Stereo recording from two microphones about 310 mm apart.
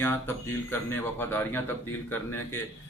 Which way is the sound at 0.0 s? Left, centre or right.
Centre.